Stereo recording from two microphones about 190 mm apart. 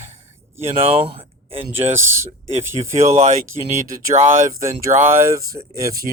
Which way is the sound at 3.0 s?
35° right (ahead or behind).